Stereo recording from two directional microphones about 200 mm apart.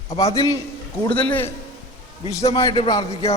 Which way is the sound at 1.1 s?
5° left (ahead or behind).